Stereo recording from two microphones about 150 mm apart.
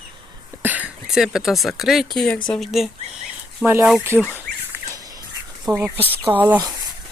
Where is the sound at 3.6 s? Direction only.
15° right (ahead or behind).